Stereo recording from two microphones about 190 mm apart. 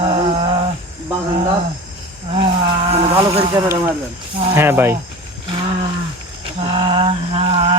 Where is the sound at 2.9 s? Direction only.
35° right (ahead or behind).